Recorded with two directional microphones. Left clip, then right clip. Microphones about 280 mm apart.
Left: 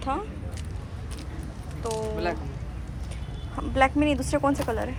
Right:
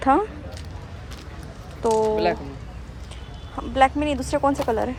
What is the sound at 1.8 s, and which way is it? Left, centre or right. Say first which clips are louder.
Speech: right 9 dB; right.